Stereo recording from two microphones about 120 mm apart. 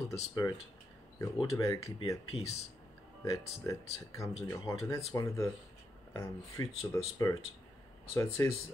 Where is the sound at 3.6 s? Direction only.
25° left (ahead or behind).